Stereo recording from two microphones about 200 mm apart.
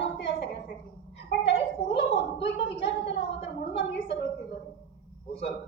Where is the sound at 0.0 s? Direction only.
60° left (ahead or behind).